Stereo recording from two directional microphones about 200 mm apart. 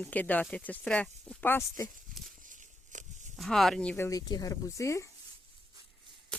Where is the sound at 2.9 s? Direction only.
40° right (ahead or behind).